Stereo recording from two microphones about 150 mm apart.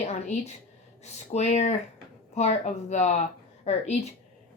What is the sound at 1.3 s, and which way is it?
A woman's voice, 50° left (ahead or behind).